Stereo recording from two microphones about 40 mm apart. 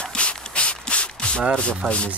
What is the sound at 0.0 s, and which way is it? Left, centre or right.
Rub, left.